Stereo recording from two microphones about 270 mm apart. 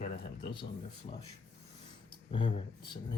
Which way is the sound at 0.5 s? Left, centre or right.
Centre.